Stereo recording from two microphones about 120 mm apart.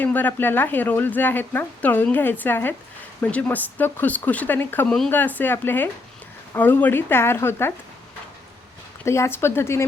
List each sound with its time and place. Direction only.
0.0 s a woman's voice: 15° left (ahead or behind)
9.0 s speech: 25° left (ahead or behind)